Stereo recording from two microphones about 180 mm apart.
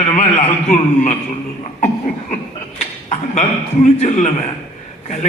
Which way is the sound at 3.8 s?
35° left (ahead or behind).